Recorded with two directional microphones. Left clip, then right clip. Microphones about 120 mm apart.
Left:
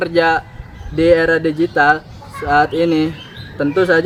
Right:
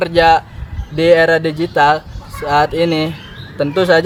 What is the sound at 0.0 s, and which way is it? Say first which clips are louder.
Speech: right 4 dB; 15° right (ahead or behind).